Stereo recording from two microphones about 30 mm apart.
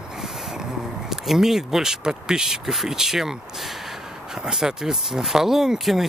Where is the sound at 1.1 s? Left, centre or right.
Centre.